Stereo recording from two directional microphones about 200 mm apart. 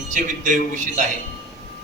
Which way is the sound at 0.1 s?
40° right (ahead or behind).